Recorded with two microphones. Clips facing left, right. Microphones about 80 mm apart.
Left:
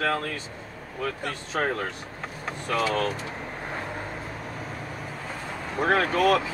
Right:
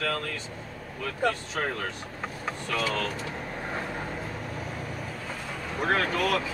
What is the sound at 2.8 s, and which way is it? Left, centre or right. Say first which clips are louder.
Speech: left 4 dB; left.